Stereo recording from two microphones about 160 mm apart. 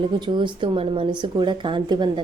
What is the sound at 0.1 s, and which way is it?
A woman's voice, 30° right (ahead or behind).